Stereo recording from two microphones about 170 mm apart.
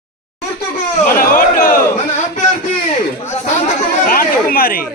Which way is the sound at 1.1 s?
60° left (ahead or behind).